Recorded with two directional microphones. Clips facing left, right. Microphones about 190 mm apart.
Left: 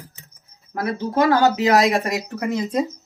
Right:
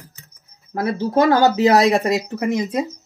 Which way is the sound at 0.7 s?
30° right (ahead or behind).